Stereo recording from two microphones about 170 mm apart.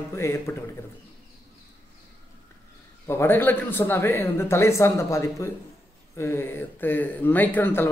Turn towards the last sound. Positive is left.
turn(degrees=10)  # may be behind; listen again after turning